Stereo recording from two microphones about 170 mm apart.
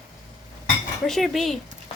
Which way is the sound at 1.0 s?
Centre (ahead or behind).